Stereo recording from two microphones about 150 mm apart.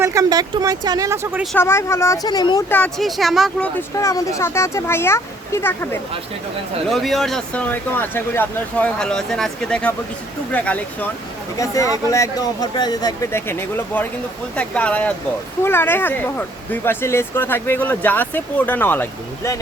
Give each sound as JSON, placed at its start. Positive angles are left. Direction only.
{"t": 0.0, "sound": "speech", "side_deg": -25}
{"t": 1.5, "sound": "speech", "side_deg": 15}
{"t": 2.6, "sound": "speech", "side_deg": 10}
{"t": 3.0, "sound": "speech", "side_deg": 0}
{"t": 3.8, "sound": "speech", "side_deg": 20}
{"t": 6.9, "sound": "speech", "side_deg": 0}
{"t": 11.5, "sound": "speech", "side_deg": 20}